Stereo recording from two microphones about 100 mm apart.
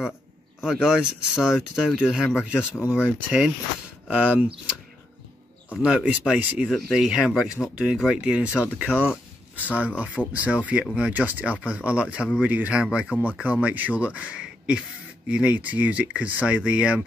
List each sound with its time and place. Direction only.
0.6 s speech: 5° right (ahead or behind)
5.8 s speech: 10° right (ahead or behind)
8.5 s speech: 20° left (ahead or behind)
8.7 s speech: 15° right (ahead or behind)